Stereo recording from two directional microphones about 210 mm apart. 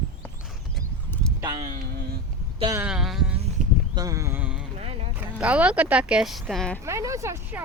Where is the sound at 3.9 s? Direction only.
15° right (ahead or behind).